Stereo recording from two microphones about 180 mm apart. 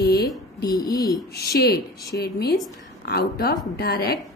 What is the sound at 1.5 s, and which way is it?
A woman's voice, 60° left (ahead or behind).